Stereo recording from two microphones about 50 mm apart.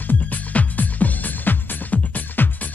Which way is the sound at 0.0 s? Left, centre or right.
Left.